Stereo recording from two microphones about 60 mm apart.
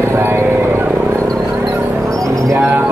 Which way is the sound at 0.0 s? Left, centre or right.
Right.